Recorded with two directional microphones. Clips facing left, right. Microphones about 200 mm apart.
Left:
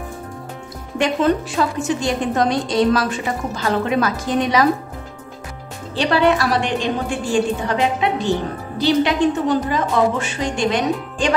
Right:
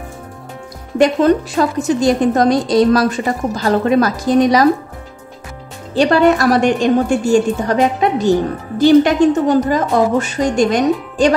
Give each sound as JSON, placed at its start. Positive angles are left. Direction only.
{"t": 0.9, "sound": "a woman's voice", "side_deg": -40}
{"t": 5.9, "sound": "a woman's voice", "side_deg": -45}